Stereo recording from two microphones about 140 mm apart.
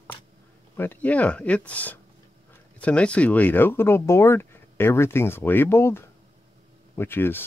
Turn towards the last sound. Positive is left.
turn(degrees=15)  # may be behind; listen again after turning